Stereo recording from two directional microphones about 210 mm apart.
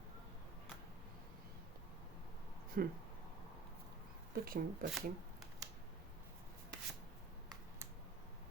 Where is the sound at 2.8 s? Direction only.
45° right (ahead or behind).